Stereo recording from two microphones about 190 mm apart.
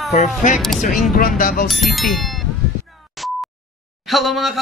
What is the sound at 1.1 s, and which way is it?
Speech, 50° left (ahead or behind).